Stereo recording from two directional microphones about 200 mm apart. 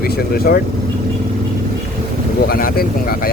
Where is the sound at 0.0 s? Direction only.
50° left (ahead or behind).